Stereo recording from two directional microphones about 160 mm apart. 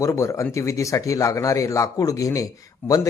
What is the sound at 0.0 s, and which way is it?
Speech, 20° left (ahead or behind).